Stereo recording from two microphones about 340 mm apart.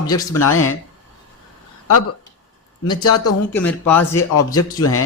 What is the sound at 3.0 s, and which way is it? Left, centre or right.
Speech, left.